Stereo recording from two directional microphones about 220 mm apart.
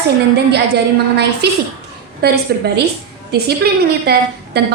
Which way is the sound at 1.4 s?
50° right (ahead or behind).